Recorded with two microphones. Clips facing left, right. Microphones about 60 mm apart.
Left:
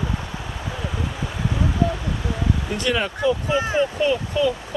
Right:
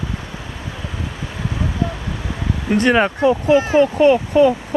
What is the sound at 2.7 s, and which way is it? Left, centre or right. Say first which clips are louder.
Speech: right 12 dB; right.